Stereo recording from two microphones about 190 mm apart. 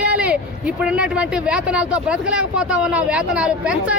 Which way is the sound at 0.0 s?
5° right (ahead or behind).